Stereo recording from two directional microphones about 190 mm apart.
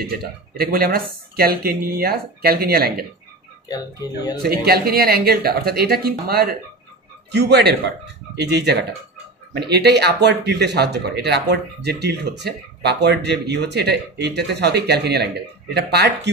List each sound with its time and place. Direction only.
0.1 s speech: 50° right (ahead or behind)
3.6 s speech: 20° left (ahead or behind)
4.4 s a man's voice: 55° right (ahead or behind)